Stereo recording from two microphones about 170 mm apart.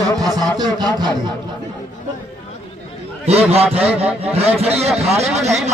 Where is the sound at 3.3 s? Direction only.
35° right (ahead or behind).